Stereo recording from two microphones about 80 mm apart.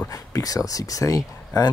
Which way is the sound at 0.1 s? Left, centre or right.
Left.